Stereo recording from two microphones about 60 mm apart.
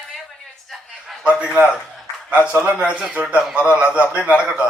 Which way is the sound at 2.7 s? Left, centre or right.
Right.